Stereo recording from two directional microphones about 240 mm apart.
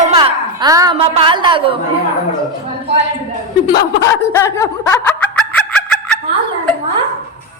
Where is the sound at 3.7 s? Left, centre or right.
Centre.